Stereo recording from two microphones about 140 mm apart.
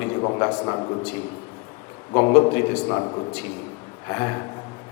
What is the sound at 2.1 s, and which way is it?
Speech, 20° left (ahead or behind).